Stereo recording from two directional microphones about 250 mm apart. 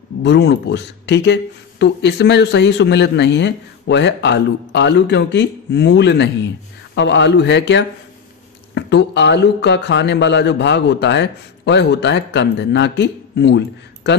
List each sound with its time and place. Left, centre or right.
0.2 s speech: left